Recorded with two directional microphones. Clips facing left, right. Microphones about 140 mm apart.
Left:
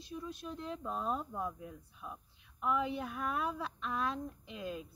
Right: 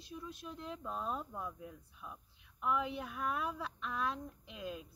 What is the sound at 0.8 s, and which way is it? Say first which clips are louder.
Speech: left 3 dB; 30° left (ahead or behind).